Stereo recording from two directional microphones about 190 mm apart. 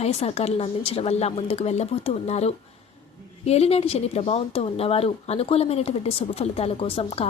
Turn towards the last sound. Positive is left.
turn(degrees=30)  # may be behind; listen again after turning